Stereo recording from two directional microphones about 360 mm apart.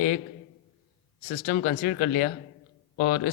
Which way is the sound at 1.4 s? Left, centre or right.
Left.